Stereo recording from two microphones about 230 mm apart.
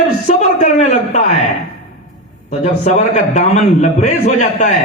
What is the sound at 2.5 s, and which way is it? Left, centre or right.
A man's voice, left.